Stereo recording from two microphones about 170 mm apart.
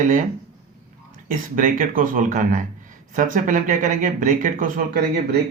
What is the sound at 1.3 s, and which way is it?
Speech, 55° right (ahead or behind).